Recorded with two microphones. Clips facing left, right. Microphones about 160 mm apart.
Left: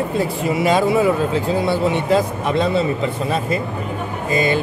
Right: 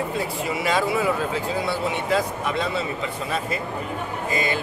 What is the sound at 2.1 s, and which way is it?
Speech, 25° left (ahead or behind).